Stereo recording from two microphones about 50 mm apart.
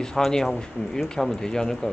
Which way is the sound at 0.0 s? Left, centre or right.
Centre.